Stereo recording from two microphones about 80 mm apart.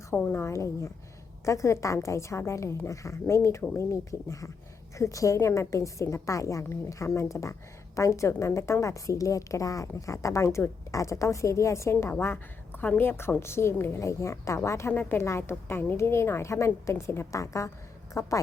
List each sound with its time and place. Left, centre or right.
0.3 s a woman's voice: left